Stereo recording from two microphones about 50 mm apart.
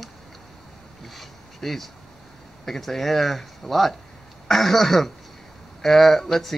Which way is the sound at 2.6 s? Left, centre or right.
Centre.